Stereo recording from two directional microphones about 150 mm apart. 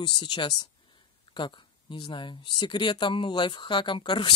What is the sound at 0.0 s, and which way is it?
Speech, 30° left (ahead or behind).